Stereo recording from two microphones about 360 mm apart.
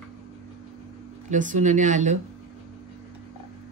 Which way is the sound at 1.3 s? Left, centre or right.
Right.